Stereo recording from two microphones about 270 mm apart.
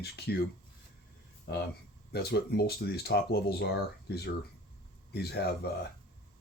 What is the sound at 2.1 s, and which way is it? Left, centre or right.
Speech, left.